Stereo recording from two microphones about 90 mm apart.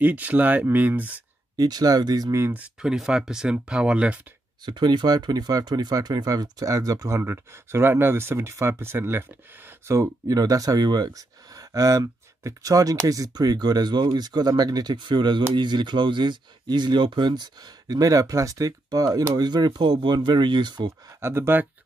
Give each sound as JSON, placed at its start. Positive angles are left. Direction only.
{"t": 0.0, "sound": "speech", "side_deg": -15}
{"t": 1.6, "sound": "speech", "side_deg": -45}
{"t": 2.5, "sound": "speech", "side_deg": -10}
{"t": 4.6, "sound": "speech", "side_deg": -55}
{"t": 9.9, "sound": "speech", "side_deg": -40}
{"t": 21.2, "sound": "speech", "side_deg": -30}